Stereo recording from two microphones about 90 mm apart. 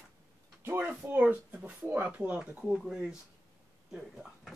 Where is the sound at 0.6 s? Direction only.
25° right (ahead or behind); by 4.5 s centre (ahead or behind).